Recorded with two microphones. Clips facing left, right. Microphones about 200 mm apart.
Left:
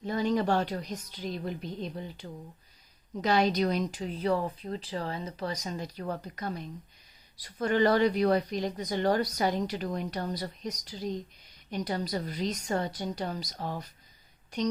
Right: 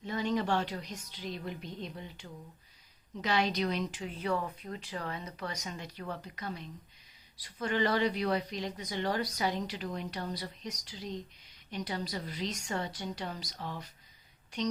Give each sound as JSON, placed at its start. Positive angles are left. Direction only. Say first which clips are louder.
{"t": 0.0, "sound": "speech", "louder": "left 4 dB", "side_deg": 40}